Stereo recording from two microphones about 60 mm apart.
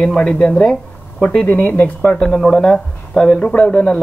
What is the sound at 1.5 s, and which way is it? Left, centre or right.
Speech, left.